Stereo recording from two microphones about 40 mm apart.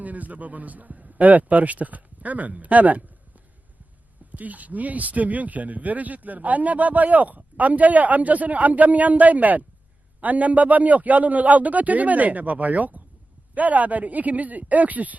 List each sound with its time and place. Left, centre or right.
0.0 s speech: right
4.3 s speech: right